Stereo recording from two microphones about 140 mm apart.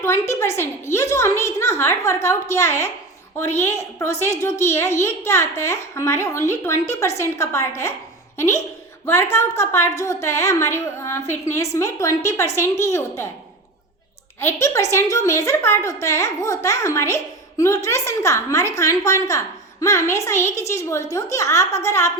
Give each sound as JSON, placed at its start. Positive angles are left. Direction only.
{"t": 0.0, "sound": "a woman's voice", "side_deg": 20}
{"t": 14.3, "sound": "a woman's voice", "side_deg": 20}